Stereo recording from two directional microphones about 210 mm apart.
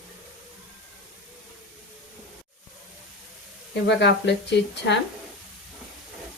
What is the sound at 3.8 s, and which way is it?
Speech, 55° left (ahead or behind).